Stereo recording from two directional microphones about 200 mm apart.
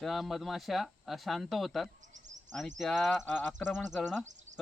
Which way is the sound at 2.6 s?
Centre (ahead or behind).